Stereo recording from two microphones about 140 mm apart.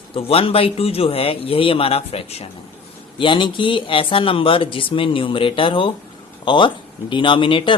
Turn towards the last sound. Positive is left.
turn(degrees=40)  # may be behind; listen again after turning